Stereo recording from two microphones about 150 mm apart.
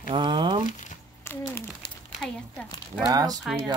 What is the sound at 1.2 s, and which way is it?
A child's voice, 15° left (ahead or behind).